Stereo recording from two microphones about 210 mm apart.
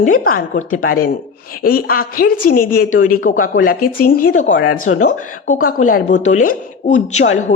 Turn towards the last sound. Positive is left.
turn(degrees=35)  # may be behind; listen again after turning